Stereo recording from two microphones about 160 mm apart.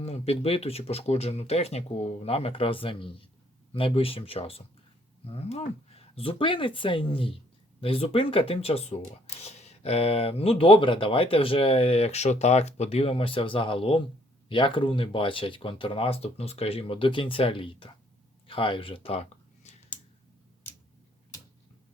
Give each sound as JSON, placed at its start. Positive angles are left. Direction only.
{"t": 0.0, "sound": "speech", "side_deg": 40}